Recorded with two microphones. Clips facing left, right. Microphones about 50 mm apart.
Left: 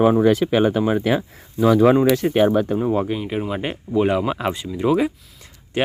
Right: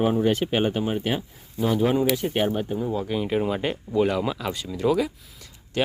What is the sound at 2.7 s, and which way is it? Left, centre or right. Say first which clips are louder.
Speech: left 7 dB; left.